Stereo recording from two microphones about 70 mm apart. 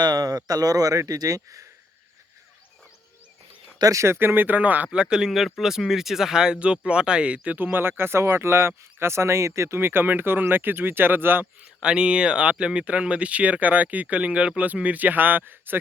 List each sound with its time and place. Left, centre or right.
0.0 s speech: right
3.9 s speech: right
4.9 s speech: centre; by 11.4 s right
11.8 s speech: centre; by 15.8 s right